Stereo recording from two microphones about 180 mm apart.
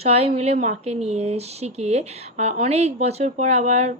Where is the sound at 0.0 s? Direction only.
35° right (ahead or behind).